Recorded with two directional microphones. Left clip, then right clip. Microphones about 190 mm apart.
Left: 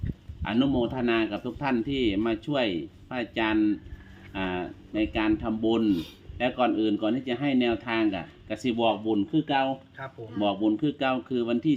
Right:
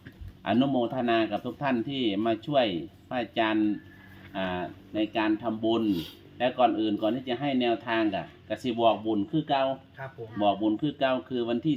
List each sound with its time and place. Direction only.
0.4 s speech: 15° left (ahead or behind)